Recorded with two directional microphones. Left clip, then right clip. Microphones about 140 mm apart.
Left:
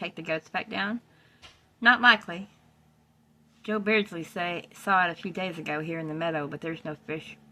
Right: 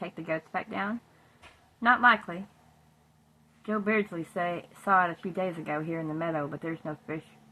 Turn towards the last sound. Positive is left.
turn(degrees=20)  # may be behind; listen again after turning